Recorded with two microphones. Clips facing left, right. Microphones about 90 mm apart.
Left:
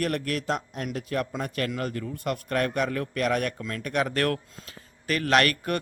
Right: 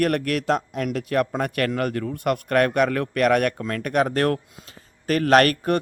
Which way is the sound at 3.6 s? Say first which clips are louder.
Right 6 dB; 50° right (ahead or behind).